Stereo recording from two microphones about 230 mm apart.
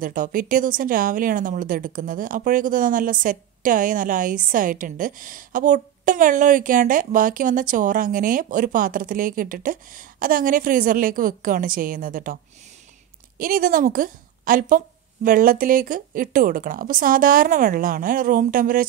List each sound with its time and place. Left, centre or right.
0.0 s speech: right
13.4 s a woman's voice: right